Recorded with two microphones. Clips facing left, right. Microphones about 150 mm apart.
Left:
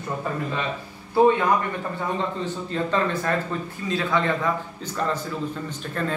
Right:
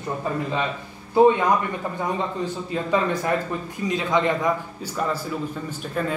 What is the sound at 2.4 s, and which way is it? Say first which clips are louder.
A man's voice: even; 10° right (ahead or behind).